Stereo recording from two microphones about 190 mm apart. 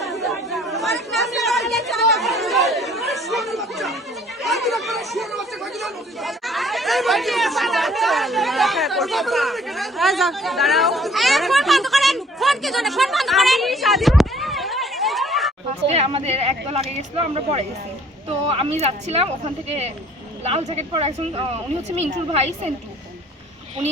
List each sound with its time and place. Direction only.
0.0 s chatter: centre (ahead or behind)
15.9 s speech: 30° right (ahead or behind)